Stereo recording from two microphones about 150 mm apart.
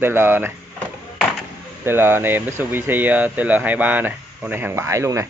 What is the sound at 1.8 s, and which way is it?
Speech, 15° right (ahead or behind).